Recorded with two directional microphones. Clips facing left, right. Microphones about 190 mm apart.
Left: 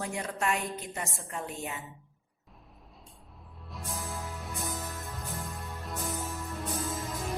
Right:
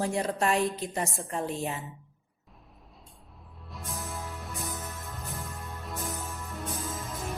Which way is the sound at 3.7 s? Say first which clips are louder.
Even; centre (ahead or behind).